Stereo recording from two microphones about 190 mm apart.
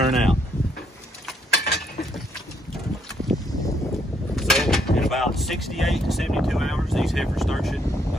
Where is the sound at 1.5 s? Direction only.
60° left (ahead or behind).